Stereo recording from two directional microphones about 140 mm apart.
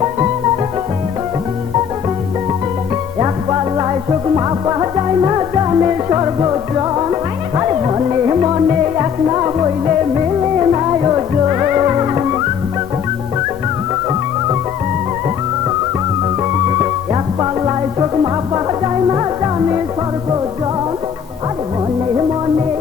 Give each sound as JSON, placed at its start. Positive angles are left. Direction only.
{"t": 3.2, "sound": "music", "side_deg": -30}
{"t": 19.1, "sound": "music", "side_deg": -25}